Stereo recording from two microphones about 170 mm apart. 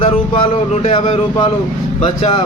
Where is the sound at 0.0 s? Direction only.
35° left (ahead or behind).